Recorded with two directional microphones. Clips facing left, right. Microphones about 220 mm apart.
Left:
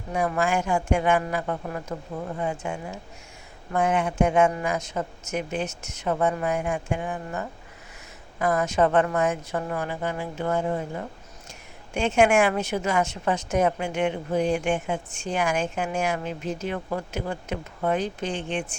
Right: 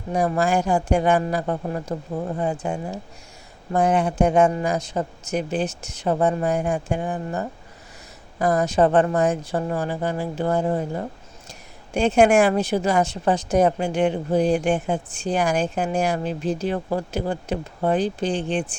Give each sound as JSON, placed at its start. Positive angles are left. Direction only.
{"t": 0.1, "sound": "a woman's voice", "side_deg": -35}